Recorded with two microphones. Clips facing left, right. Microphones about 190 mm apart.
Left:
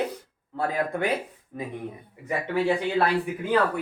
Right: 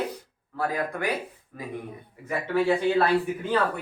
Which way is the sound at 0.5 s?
25° left (ahead or behind).